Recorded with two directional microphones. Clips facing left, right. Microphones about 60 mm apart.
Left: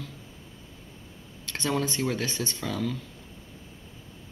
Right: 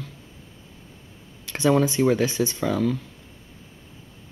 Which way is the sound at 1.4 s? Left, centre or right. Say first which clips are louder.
Right 9 dB; centre.